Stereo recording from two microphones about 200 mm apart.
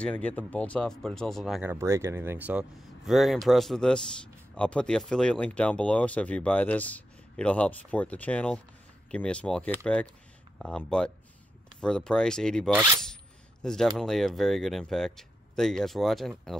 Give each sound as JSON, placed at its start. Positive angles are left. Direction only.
{"t": 0.0, "sound": "speech", "side_deg": 5}
{"t": 13.0, "sound": "a sound", "side_deg": 5}
{"t": 13.9, "sound": "speech", "side_deg": 0}